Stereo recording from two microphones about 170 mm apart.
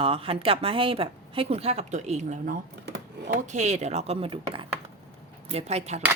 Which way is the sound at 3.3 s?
45° right (ahead or behind).